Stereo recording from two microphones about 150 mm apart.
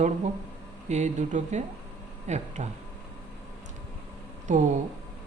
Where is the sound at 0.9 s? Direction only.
50° right (ahead or behind).